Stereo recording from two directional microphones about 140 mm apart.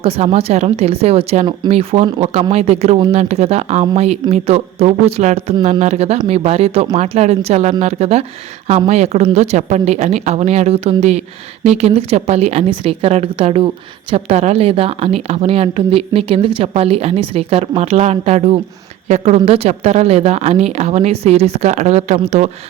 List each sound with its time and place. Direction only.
0.0 s a woman's voice: 45° right (ahead or behind)